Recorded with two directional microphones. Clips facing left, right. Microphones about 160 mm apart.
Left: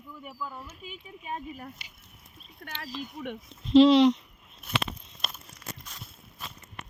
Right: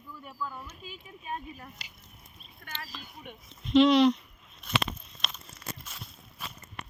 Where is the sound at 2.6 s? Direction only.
55° left (ahead or behind).